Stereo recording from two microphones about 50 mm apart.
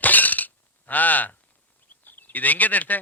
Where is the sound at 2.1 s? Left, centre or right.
Left.